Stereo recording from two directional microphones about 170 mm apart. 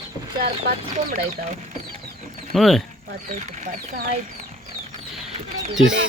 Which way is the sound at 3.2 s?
50° right (ahead or behind).